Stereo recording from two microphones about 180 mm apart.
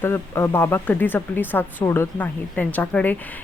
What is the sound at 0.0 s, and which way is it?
Speech, 15° left (ahead or behind).